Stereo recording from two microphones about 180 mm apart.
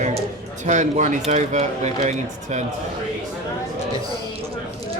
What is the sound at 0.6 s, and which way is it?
Speech, 40° right (ahead or behind).